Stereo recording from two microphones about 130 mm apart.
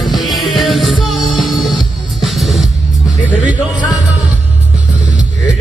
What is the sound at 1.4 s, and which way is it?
Music, centre (ahead or behind).